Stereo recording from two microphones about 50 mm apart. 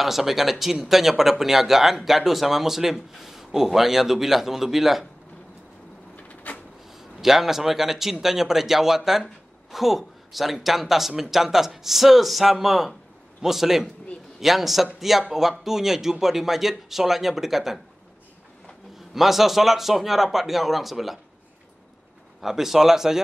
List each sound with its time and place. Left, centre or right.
0.0 s speech: centre
6.2 s a sound: left
6.9 s a man's voice: centre
18.9 s speech: centre
22.4 s a man's voice: centre